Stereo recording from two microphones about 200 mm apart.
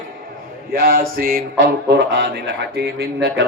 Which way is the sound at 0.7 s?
45° right (ahead or behind).